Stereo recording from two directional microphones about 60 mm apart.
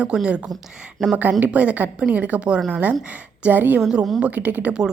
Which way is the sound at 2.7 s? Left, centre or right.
Right.